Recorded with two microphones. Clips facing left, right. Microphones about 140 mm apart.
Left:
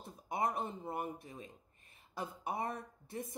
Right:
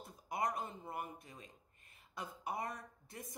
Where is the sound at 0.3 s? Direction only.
25° left (ahead or behind).